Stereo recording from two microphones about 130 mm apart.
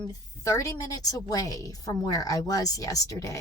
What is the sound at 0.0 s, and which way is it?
A woman's voice, 30° left (ahead or behind).